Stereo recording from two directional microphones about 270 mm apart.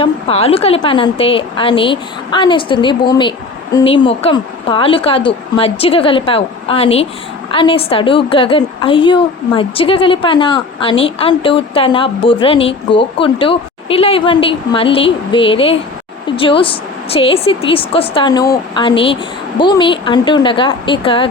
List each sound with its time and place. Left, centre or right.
0.0 s a woman's voice: left